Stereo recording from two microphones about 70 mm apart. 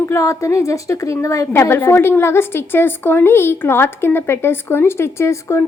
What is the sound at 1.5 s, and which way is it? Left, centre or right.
A woman's voice, left.